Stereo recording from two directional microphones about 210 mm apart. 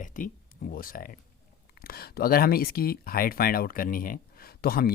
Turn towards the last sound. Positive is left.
turn(degrees=45)  # may be behind; listen again after turning